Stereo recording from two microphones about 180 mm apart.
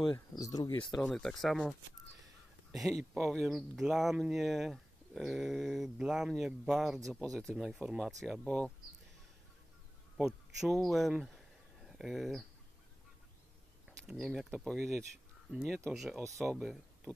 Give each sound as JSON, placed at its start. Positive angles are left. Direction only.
{"t": 0.0, "sound": "speech", "side_deg": 20}
{"t": 0.9, "sound": "speech", "side_deg": 0}
{"t": 10.1, "sound": "speech", "side_deg": 0}
{"t": 14.0, "sound": "speech", "side_deg": 0}